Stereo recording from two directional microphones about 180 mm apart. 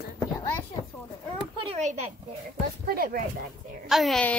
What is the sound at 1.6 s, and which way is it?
Speech, 35° right (ahead or behind).